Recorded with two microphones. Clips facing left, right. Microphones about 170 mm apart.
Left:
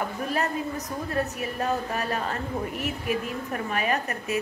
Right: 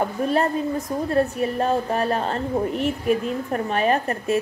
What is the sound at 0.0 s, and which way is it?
A woman's voice, 30° right (ahead or behind).